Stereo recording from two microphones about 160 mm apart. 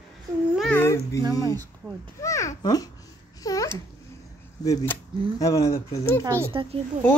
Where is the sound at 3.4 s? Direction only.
20° left (ahead or behind).